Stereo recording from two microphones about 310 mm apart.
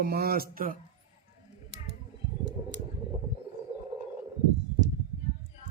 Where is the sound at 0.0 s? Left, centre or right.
Right.